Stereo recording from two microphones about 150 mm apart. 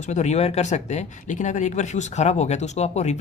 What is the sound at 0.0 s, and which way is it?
Speech, 50° left (ahead or behind).